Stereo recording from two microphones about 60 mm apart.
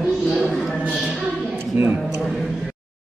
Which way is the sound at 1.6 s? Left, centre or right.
Right.